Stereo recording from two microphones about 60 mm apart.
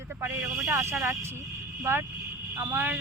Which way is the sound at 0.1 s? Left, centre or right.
Right.